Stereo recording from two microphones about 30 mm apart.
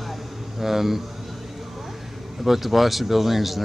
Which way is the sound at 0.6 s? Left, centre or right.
Centre.